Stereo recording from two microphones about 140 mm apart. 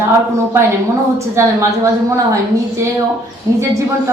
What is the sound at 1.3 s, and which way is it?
Speech, 20° right (ahead or behind).